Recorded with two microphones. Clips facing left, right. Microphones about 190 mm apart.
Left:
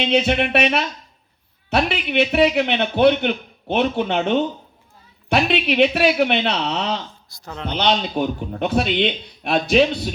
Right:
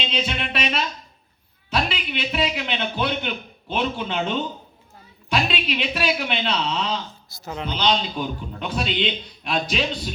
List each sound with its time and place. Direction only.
0.0 s a man's voice: 60° left (ahead or behind)
7.3 s speech: 5° right (ahead or behind)
7.7 s a man's voice: 60° left (ahead or behind)